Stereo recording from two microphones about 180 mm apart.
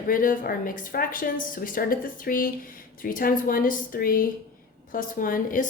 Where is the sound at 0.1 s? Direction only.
50° left (ahead or behind).